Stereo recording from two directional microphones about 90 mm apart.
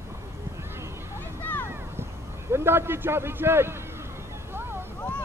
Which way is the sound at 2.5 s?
25° right (ahead or behind).